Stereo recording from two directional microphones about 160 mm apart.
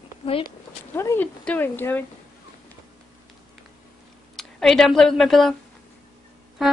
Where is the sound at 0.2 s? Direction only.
35° left (ahead or behind).